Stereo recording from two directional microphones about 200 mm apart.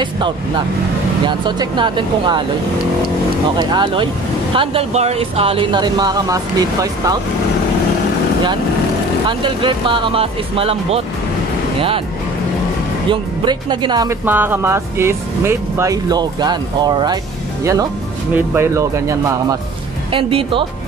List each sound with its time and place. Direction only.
1.2 s speech: 25° right (ahead or behind)
3.5 s speech: 20° right (ahead or behind)
9.4 s speech: 25° right (ahead or behind)
13.1 s speech: 20° right (ahead or behind)
18.3 s speech: 10° right (ahead or behind)
20.1 s speech: 25° right (ahead or behind)